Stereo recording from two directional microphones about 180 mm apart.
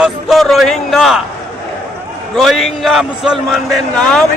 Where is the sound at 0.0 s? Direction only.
Centre (ahead or behind).